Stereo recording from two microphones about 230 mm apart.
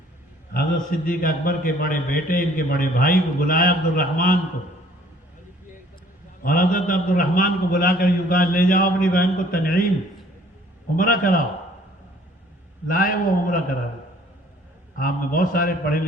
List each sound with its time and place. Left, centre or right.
0.5 s a man's voice: left
6.4 s a man's voice: left
10.9 s a man's voice: left
12.9 s a man's voice: left
14.9 s a man's voice: left